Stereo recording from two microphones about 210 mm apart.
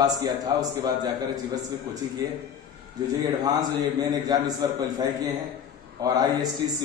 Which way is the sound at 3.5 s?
20° right (ahead or behind).